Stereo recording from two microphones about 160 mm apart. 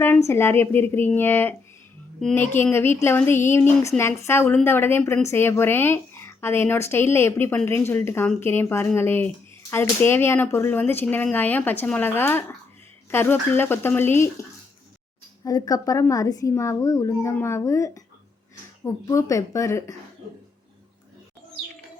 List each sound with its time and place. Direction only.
0.3 s a woman's voice: 15° left (ahead or behind)
15.4 s a child's voice: 25° left (ahead or behind)